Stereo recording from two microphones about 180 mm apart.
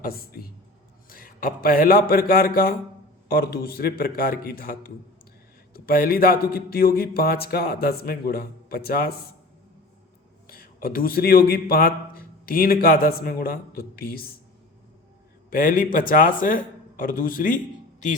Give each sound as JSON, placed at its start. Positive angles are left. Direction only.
{"t": 0.0, "sound": "a man's voice", "side_deg": 55}
{"t": 10.5, "sound": "a man's voice", "side_deg": 55}
{"t": 15.4, "sound": "a man's voice", "side_deg": 50}